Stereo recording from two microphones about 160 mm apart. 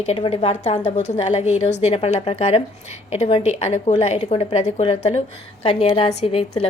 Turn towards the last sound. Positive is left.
turn(degrees=40)  # may be behind; listen again after turning